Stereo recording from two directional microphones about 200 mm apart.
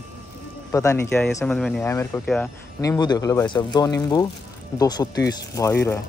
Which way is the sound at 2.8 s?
20° left (ahead or behind).